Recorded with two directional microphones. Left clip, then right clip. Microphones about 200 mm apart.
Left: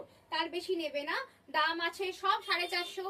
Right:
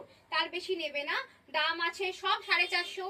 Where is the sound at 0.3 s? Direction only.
20° left (ahead or behind).